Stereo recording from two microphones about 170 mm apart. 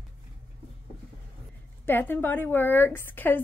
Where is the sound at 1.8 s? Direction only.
10° left (ahead or behind).